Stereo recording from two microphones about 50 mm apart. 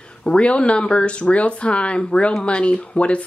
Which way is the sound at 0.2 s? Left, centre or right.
Left.